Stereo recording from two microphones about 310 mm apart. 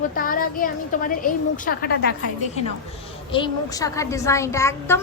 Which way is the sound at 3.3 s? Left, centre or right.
Centre.